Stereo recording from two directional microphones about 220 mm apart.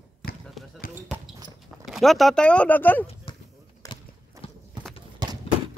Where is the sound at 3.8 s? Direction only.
20° left (ahead or behind).